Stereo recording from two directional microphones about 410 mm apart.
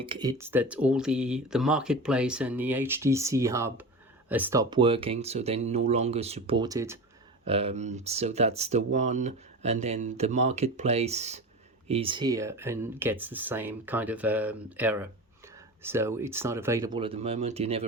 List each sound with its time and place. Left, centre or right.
0.0 s speech: centre